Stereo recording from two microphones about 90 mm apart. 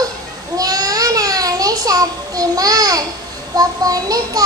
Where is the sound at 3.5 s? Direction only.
40° right (ahead or behind).